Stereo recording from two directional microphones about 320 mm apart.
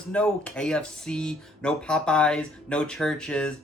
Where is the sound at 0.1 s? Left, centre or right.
Centre.